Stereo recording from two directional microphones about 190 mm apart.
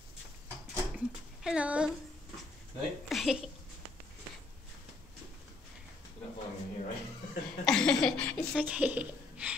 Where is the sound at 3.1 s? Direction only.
Centre (ahead or behind).